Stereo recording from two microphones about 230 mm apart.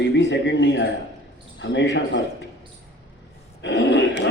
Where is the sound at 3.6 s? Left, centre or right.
Left.